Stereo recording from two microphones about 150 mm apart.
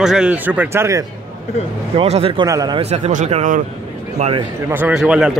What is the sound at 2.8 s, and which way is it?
Speech, 45° right (ahead or behind).